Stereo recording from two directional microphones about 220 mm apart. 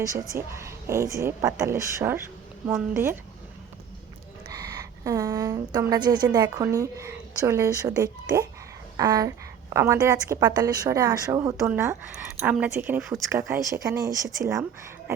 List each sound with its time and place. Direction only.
0.0 s a woman's voice: 15° right (ahead or behind)
4.5 s a woman's voice: 15° right (ahead or behind)
13.5 s a woman's voice: 15° right (ahead or behind)